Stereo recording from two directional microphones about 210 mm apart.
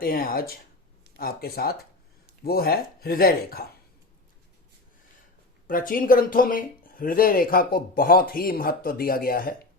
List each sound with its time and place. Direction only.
0.0 s speech: 45° left (ahead or behind)
5.6 s speech: 40° left (ahead or behind)